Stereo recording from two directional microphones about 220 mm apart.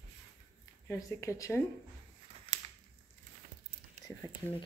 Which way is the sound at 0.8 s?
15° left (ahead or behind).